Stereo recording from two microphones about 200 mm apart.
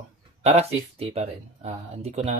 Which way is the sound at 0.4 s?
30° right (ahead or behind).